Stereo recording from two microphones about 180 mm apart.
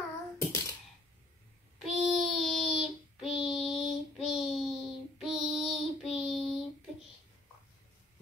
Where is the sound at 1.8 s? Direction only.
Centre (ahead or behind).